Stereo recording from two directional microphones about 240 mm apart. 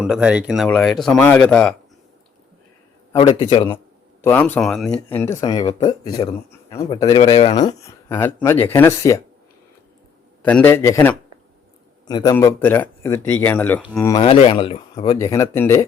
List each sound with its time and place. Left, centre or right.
0.0 s speech: centre
3.1 s a man's voice: centre
4.2 s speech: centre
10.4 s speech: centre
14.0 s speech: centre